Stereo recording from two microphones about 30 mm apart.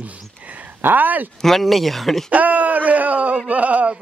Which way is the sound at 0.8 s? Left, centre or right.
Right.